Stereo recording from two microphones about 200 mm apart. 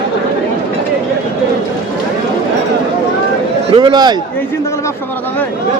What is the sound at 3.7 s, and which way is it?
Speech, 25° right (ahead or behind).